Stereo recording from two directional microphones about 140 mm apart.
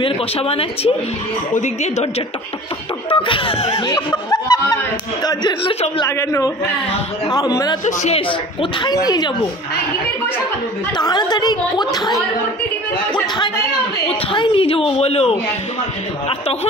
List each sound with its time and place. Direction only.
0.0 s speech: 40° left (ahead or behind)
1.5 s speech: 55° left (ahead or behind)
3.1 s speech: 40° left (ahead or behind)
3.8 s speech: 30° left (ahead or behind)
6.0 s speech: 20° left (ahead or behind)
7.8 s speech: 55° left (ahead or behind)
8.8 s speech: 30° left (ahead or behind)
11.0 s speech: 30° left (ahead or behind)
14.0 s speech: 40° left (ahead or behind)